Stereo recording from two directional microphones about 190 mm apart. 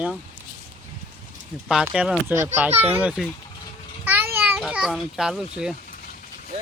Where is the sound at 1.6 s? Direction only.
5° right (ahead or behind).